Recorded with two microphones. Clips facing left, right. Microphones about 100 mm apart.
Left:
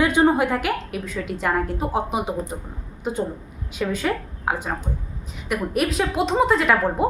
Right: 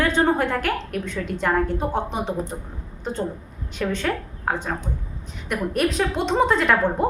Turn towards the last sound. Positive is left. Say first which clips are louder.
# even
turn(degrees=5)  # may be behind; listen again after turning